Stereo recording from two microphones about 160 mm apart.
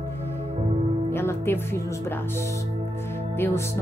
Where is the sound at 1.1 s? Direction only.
15° left (ahead or behind).